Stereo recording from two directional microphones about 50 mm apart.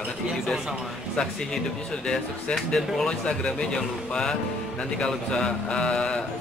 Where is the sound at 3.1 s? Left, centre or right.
Left.